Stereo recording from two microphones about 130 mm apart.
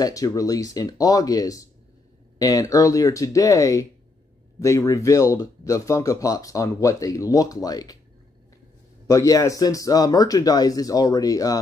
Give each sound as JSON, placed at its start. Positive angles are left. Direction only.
{"t": 0.0, "sound": "speech", "side_deg": 30}
{"t": 9.0, "sound": "speech", "side_deg": 25}